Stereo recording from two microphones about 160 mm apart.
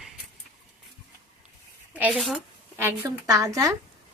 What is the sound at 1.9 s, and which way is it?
Speech, 5° right (ahead or behind).